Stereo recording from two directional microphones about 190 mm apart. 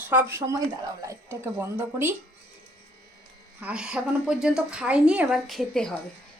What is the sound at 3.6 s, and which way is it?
A woman's voice, 5° right (ahead or behind).